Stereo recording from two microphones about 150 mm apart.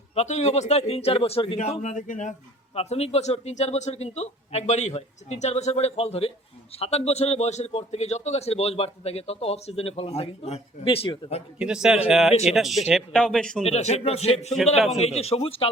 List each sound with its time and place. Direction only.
0.1 s a man's voice: 45° left (ahead or behind)
1.5 s a man's voice: 50° left (ahead or behind)
2.7 s a man's voice: 45° left (ahead or behind)
11.6 s speech: 5° right (ahead or behind)
12.3 s a man's voice: 45° left (ahead or behind)
12.5 s speech: centre (ahead or behind)
13.7 s a man's voice: 45° left (ahead or behind)
14.6 s speech: centre (ahead or behind)
15.0 s speech: 45° left (ahead or behind)